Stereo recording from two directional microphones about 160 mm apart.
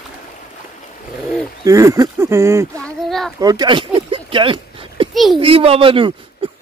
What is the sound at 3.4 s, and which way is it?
A child's voice, 25° right (ahead or behind).